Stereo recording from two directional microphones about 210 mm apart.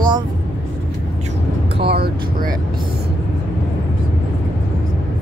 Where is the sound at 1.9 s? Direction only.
45° right (ahead or behind).